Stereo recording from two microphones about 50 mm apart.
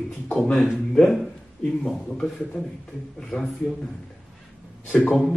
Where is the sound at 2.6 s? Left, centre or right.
Centre.